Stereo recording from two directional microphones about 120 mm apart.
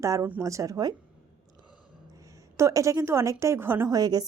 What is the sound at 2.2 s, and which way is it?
A woman's voice, 25° right (ahead or behind).